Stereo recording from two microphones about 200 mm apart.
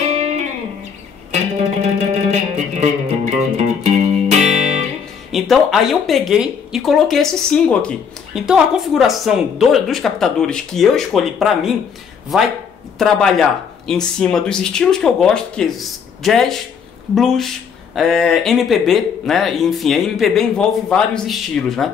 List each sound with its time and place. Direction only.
1.3 s music: 35° right (ahead or behind)
5.3 s speech: centre (ahead or behind)